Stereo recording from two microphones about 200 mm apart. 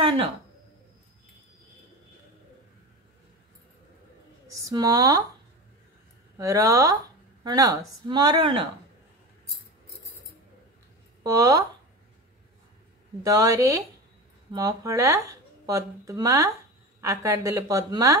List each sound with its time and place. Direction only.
4.5 s speech: 15° right (ahead or behind)
6.3 s speech: 15° right (ahead or behind)
11.3 s speech: 15° right (ahead or behind)
13.2 s speech: 20° right (ahead or behind)